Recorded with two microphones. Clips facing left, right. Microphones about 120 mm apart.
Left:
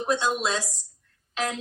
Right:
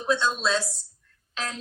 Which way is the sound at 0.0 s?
15° left (ahead or behind).